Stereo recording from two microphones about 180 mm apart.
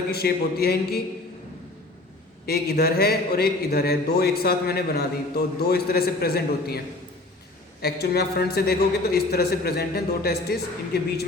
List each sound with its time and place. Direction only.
0.1 s a man's voice: 60° left (ahead or behind)
2.5 s a man's voice: 60° left (ahead or behind)
7.8 s a man's voice: 60° left (ahead or behind)